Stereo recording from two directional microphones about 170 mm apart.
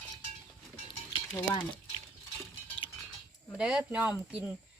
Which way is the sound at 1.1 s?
25° left (ahead or behind).